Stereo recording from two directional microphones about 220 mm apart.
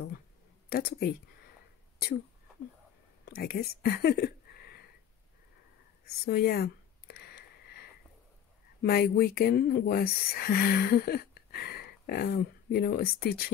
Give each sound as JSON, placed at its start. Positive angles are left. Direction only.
{"t": 0.7, "sound": "speech", "side_deg": 45}
{"t": 3.3, "sound": "speech", "side_deg": 45}
{"t": 6.2, "sound": "a sound", "side_deg": 45}
{"t": 8.8, "sound": "speech", "side_deg": 45}